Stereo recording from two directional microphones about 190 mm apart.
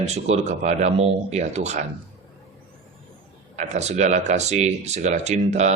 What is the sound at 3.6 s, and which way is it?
A man's voice, 35° right (ahead or behind).